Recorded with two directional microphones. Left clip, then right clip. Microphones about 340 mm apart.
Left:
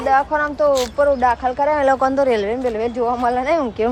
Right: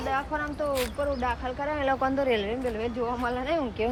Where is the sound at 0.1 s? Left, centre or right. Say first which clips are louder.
Left 14 dB; centre.